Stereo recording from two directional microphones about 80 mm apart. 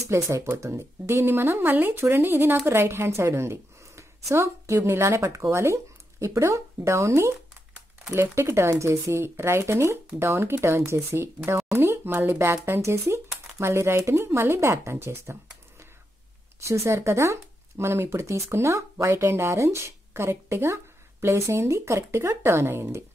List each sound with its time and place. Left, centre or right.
0.1 s speech: right
16.6 s speech: right